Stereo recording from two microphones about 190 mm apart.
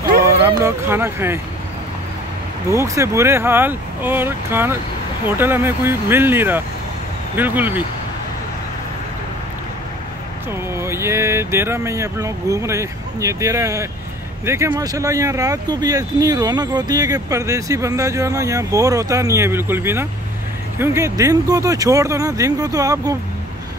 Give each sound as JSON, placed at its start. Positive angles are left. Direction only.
{"t": 0.6, "sound": "speech", "side_deg": -15}
{"t": 2.7, "sound": "speech", "side_deg": -15}
{"t": 10.7, "sound": "speech", "side_deg": -15}